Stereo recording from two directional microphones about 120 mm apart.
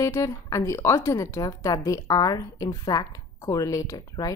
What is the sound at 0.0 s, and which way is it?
A woman's voice, 25° left (ahead or behind).